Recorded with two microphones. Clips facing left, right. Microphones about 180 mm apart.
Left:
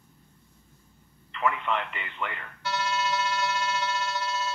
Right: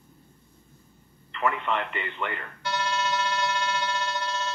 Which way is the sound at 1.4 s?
35° right (ahead or behind).